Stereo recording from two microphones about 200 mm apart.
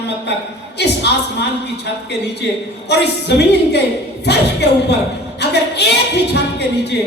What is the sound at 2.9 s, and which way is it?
Speech, 55° left (ahead or behind).